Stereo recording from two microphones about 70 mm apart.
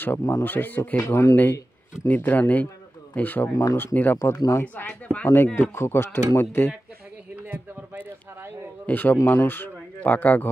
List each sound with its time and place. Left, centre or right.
0.0 s speech: left
4.8 s speech: centre
7.3 s a sound: right
8.4 s speech: right
8.8 s speech: left